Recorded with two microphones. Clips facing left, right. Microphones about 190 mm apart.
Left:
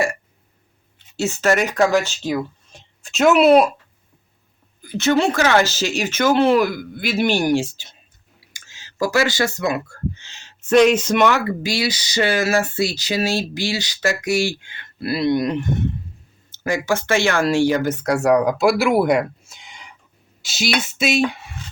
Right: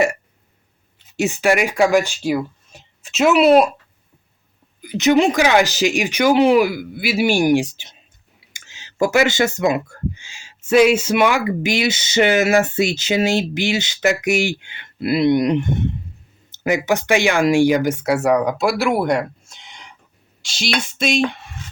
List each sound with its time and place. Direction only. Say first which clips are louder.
1.1 s speech: right 1 dB; 15° right (ahead or behind); by 3.7 s centre (ahead or behind)
4.8 s speech: right 3 dB; 15° right (ahead or behind); by 21.4 s 5° left (ahead or behind)